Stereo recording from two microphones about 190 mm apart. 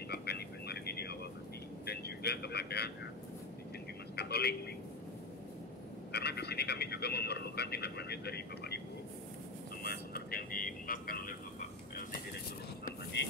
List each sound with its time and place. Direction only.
0.1 s a sound: 60° left (ahead or behind)
1.9 s speech: 60° left (ahead or behind)
4.1 s telephone: 60° left (ahead or behind)
6.1 s speech: 60° left (ahead or behind)
9.8 s vehicle: 55° left (ahead or behind)